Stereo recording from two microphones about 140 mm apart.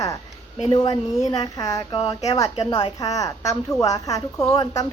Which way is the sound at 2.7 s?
30° left (ahead or behind).